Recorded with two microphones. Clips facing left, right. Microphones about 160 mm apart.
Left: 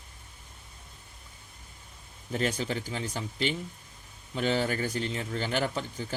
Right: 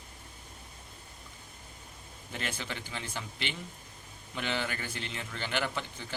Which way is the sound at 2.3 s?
40° left (ahead or behind).